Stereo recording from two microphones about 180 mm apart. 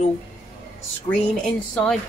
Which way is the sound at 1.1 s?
5° left (ahead or behind).